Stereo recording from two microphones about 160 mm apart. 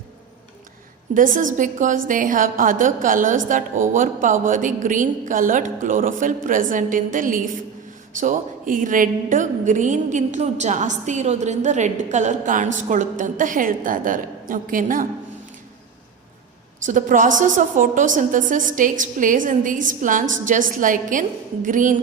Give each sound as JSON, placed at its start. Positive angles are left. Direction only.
{"t": 1.1, "sound": "a woman's voice", "side_deg": -55}
{"t": 16.8, "sound": "a woman's voice", "side_deg": -55}